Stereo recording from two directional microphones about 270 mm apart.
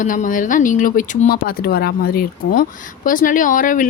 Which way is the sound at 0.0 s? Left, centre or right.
Left.